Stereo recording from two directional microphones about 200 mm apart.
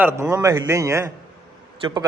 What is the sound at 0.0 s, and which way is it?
A man's voice, 15° right (ahead or behind).